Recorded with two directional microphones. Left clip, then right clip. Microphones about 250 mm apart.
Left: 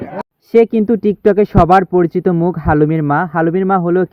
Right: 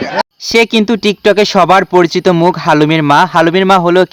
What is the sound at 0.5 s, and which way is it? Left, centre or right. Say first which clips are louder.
Speech: right 1 dB; centre.